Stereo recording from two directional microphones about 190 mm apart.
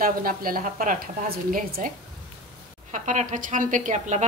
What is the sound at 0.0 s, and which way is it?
A woman's voice, 50° right (ahead or behind).